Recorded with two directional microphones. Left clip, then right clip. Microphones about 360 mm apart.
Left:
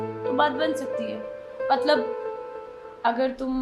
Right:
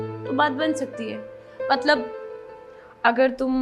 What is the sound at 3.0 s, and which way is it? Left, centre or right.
Speech, right.